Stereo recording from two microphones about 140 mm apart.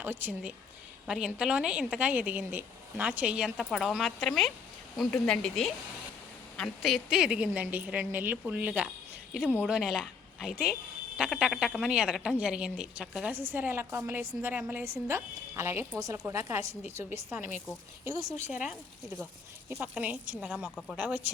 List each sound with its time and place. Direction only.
0.0 s a woman's voice: 15° right (ahead or behind)
19.8 s a woman's voice: 10° right (ahead or behind)
20.7 s speech: 5° left (ahead or behind)
20.9 s a woman's voice: 5° right (ahead or behind)